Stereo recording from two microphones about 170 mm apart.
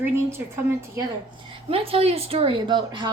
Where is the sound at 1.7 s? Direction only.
35° right (ahead or behind).